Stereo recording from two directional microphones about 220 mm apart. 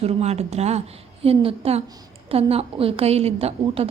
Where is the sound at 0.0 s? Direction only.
30° right (ahead or behind).